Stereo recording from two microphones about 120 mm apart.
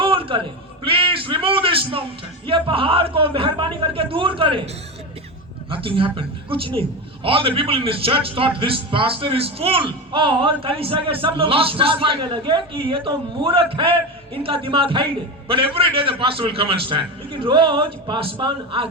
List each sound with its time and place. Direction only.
0.0 s a sound: 45° right (ahead or behind)
2.5 s a man's voice: 50° right (ahead or behind)
5.7 s a man's voice: 50° right (ahead or behind)